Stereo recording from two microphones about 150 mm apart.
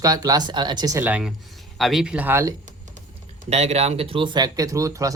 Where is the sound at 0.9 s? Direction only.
10° right (ahead or behind).